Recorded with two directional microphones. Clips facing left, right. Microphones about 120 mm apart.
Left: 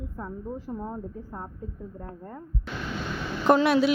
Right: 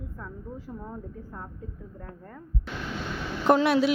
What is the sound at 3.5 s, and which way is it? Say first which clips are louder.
Speech: left 1 dB; 60° left (ahead or behind).